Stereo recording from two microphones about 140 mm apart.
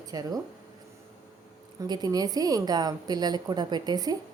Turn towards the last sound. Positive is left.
turn(degrees=-25)  # may be behind; listen again after turning